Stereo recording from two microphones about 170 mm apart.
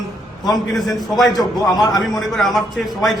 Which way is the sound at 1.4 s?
25° left (ahead or behind).